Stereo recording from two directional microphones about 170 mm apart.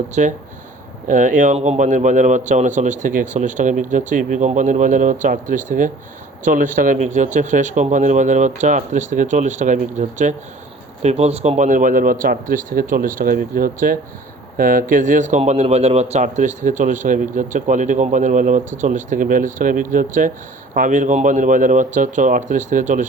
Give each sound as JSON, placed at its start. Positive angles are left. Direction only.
{"t": 0.1, "sound": "a man's voice", "side_deg": -45}